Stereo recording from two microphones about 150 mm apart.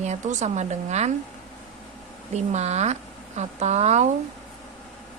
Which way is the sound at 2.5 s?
50° right (ahead or behind).